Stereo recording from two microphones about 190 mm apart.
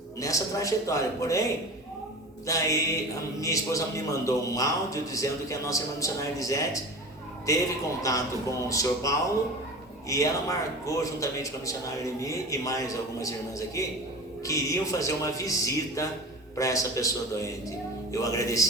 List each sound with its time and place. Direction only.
0.2 s a man's voice: 15° left (ahead or behind)
2.5 s a man's voice: 15° left (ahead or behind)